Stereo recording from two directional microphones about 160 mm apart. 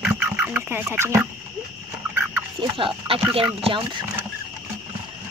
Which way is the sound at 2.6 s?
30° right (ahead or behind).